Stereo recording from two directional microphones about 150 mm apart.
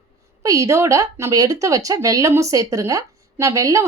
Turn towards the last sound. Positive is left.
turn(degrees=-20)  # may be behind; listen again after turning